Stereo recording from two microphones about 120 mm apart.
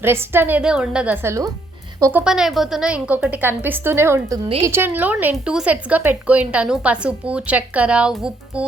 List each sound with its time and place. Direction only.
0.0 s a woman's voice: 20° right (ahead or behind)
0.6 s a woman's voice: 5° right (ahead or behind); by 1.5 s 25° right (ahead or behind)
2.1 s a woman's voice: 5° right (ahead or behind)